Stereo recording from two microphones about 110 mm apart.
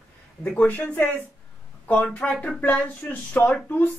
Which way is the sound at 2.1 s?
10° left (ahead or behind).